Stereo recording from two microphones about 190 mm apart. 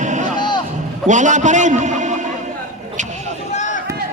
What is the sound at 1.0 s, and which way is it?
A man's voice, 40° right (ahead or behind).